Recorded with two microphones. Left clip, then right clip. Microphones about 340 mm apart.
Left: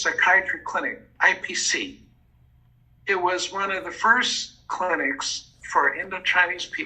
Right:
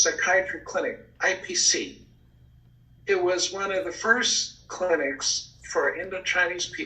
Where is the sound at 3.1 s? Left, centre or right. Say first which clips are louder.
Left 1 dB; centre.